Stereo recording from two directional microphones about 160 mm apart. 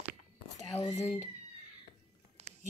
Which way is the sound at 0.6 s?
30° left (ahead or behind).